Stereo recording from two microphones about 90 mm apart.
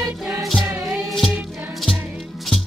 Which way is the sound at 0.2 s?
5° right (ahead or behind).